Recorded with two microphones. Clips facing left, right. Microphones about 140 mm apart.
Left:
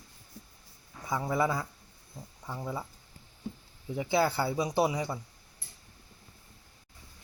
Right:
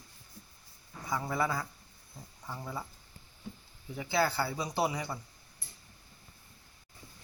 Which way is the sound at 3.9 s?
20° left (ahead or behind).